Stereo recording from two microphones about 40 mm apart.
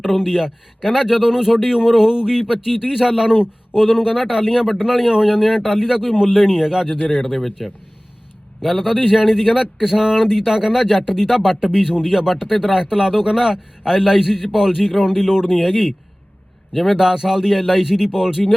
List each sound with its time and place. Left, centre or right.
0.0 s a man's voice: centre
7.2 s speech: centre
8.6 s a man's voice: centre
11.6 s a man's voice: centre